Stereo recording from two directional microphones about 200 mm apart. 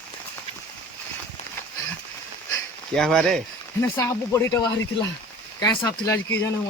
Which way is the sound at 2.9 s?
5° left (ahead or behind).